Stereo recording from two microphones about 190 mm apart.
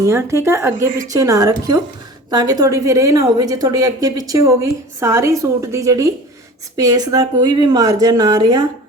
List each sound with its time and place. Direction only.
0.0 s a woman's voice: 15° right (ahead or behind)